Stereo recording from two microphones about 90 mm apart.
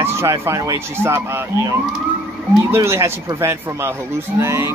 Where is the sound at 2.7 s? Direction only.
30° right (ahead or behind).